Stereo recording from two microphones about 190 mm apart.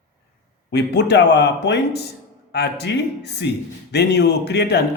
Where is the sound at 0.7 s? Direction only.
65° left (ahead or behind).